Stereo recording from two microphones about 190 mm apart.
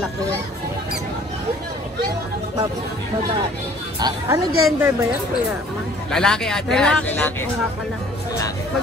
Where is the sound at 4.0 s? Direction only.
20° right (ahead or behind).